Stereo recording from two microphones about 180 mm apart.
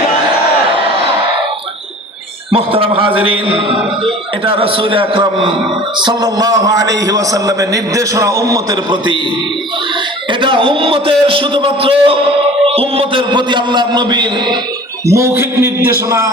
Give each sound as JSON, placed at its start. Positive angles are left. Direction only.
{"t": 2.5, "sound": "a man's voice", "side_deg": -30}
{"t": 10.2, "sound": "a man's voice", "side_deg": -25}